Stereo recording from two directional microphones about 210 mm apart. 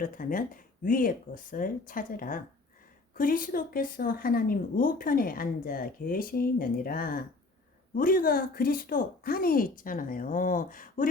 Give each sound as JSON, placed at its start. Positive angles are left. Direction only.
{"t": 0.0, "sound": "a woman's voice", "side_deg": 40}